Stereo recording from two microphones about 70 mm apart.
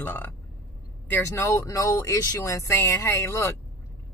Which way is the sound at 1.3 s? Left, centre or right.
Left.